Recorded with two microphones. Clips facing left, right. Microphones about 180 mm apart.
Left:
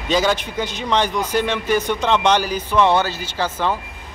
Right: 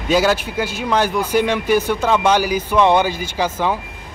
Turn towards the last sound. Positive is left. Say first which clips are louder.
# right 2 dB
turn(degrees=-10)  # may be behind; listen again after turning